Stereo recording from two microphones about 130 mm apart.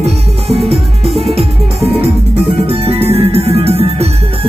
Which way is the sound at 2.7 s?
50° right (ahead or behind).